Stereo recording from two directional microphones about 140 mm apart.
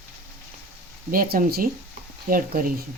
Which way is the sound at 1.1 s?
90° right.